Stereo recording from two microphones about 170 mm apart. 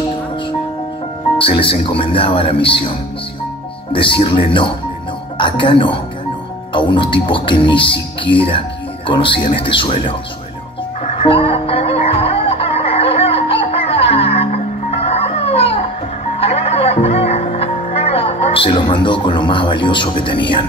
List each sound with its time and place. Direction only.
1.4 s speech: 30° left (ahead or behind)
3.9 s speech: 30° left (ahead or behind)
11.2 s music: 30° left (ahead or behind)